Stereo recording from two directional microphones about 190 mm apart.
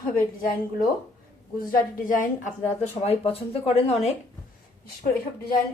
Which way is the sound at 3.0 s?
30° left (ahead or behind).